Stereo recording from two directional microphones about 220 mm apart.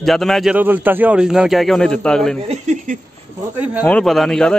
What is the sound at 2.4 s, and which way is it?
Speech, 30° right (ahead or behind).